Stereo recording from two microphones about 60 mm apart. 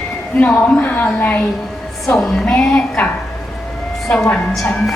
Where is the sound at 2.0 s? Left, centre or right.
Centre.